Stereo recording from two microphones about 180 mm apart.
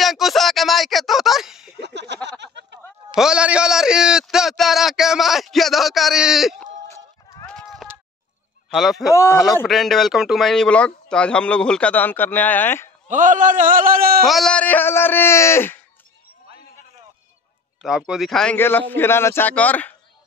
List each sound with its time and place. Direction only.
0.0 s a sound: centre (ahead or behind)
1.8 s a sound: 70° right (ahead or behind)
3.2 s a sound: 5° right (ahead or behind)
6.9 s run: 20° left (ahead or behind)
7.4 s run: centre (ahead or behind)
8.6 s speech: centre (ahead or behind)
9.1 s a man's voice: 15° left (ahead or behind)
9.7 s a man's voice: centre (ahead or behind)
13.1 s a man's voice: 45° right (ahead or behind)
14.2 s a man's voice: centre (ahead or behind)
17.8 s a man's voice: 5° right (ahead or behind)